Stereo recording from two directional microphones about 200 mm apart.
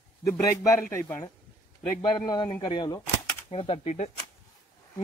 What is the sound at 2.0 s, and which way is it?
A man's voice, 20° left (ahead or behind).